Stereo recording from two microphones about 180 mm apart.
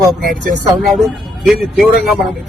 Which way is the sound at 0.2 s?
55° right (ahead or behind).